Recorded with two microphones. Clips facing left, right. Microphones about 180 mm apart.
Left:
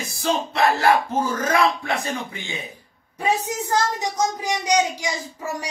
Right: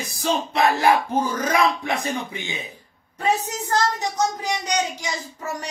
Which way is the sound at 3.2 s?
10° left (ahead or behind).